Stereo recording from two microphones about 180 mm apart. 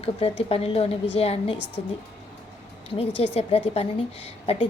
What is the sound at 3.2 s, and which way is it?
Speech, 30° left (ahead or behind).